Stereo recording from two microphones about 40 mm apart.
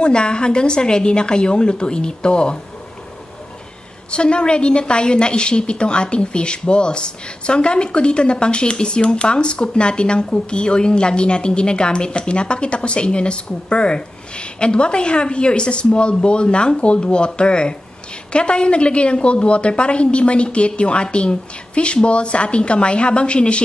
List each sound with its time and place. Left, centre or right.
0.0 s a woman's voice: left
4.1 s a woman's voice: left